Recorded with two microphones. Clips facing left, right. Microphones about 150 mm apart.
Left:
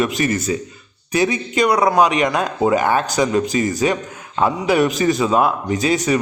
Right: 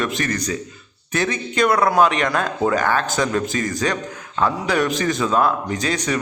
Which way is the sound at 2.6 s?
15° left (ahead or behind).